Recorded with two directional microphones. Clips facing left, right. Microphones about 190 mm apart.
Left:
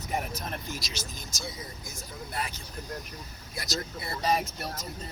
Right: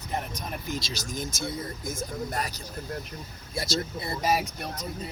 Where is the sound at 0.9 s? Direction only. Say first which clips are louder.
Right 7 dB; 50° right (ahead or behind).